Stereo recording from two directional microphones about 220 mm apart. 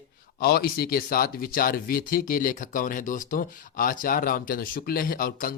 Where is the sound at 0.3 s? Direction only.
45° left (ahead or behind).